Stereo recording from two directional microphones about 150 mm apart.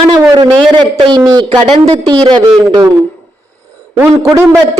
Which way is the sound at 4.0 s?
15° right (ahead or behind).